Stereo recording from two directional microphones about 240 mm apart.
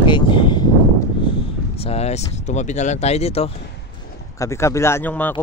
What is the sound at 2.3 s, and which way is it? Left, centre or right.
Speech, left.